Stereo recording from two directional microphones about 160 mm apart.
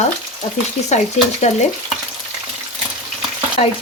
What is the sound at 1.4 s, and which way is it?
Speech, 45° left (ahead or behind).